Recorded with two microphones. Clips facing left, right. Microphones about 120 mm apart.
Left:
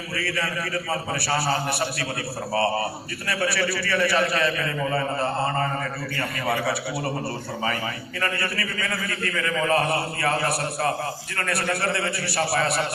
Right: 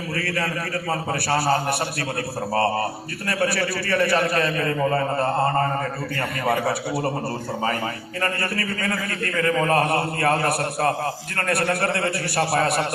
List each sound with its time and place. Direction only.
0.2 s a man's voice: 50° right (ahead or behind)
8.2 s a man's voice: 45° right (ahead or behind)